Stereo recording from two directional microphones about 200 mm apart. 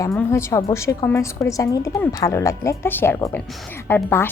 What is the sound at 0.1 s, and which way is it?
A woman's voice, 10° left (ahead or behind).